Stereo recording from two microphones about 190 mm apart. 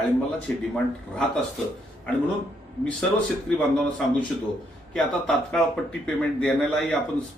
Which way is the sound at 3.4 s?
5° left (ahead or behind).